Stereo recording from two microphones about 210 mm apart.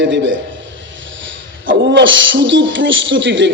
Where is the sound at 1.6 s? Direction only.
60° right (ahead or behind).